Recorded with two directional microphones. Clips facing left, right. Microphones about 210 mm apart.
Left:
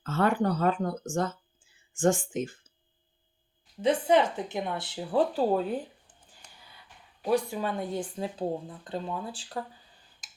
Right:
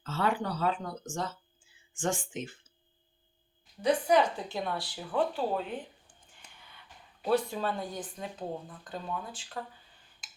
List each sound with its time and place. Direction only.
0.0 s speech: 50° left (ahead or behind)
3.8 s a woman's voice: 25° left (ahead or behind)
5.1 s speech: 40° left (ahead or behind)
7.2 s speech: 15° left (ahead or behind); by 9.6 s 35° left (ahead or behind)